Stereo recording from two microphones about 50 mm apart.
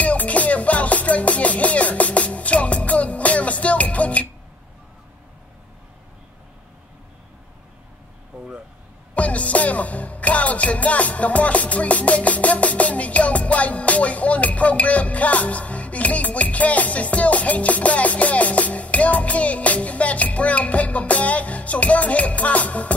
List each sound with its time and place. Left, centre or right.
0.0 s music: left
9.1 s music: left